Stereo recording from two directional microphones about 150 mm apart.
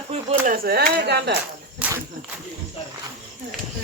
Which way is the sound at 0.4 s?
75° right (ahead or behind).